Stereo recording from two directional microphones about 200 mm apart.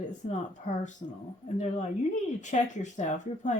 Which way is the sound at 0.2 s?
35° left (ahead or behind).